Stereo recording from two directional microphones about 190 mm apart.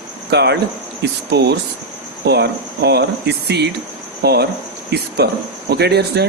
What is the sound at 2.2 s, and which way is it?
Speech, 60° right (ahead or behind).